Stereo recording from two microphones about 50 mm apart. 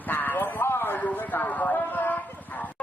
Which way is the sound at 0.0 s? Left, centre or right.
Left.